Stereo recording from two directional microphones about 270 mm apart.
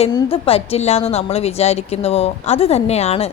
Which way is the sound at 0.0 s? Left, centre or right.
Left.